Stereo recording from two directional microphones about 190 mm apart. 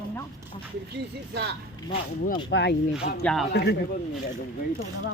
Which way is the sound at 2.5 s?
65° left (ahead or behind).